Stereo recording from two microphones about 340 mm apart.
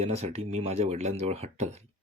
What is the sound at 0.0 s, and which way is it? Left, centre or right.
Speech, centre.